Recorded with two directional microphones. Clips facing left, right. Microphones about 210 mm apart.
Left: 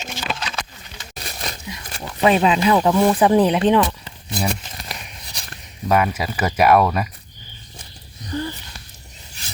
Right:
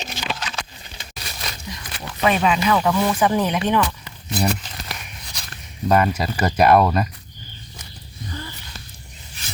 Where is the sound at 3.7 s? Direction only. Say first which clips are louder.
Left 3 dB; 20° left (ahead or behind).